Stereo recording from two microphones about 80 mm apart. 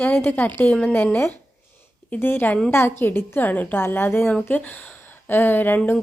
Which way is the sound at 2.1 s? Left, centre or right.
Left.